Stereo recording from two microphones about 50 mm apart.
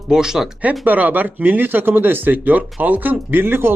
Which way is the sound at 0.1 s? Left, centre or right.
Centre.